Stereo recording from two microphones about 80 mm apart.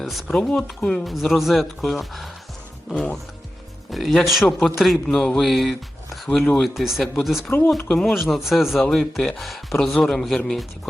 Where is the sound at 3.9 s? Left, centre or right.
Centre.